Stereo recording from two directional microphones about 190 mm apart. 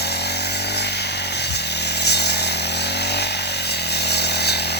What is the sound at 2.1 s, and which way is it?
Chainsaw, 60° left (ahead or behind).